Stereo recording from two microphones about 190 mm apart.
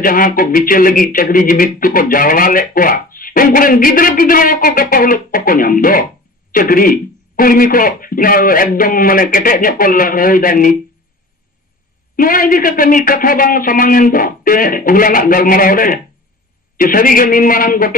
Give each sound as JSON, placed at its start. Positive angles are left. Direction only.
{"t": 0.0, "sound": "speech", "side_deg": 45}
{"t": 12.2, "sound": "speech", "side_deg": 45}